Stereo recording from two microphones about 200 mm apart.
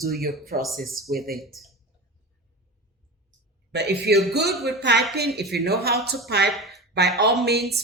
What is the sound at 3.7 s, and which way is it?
A man's voice, 55° right (ahead or behind).